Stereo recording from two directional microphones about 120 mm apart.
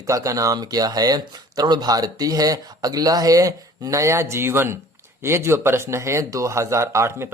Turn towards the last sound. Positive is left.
turn(degrees=-20)  # may be behind; listen again after turning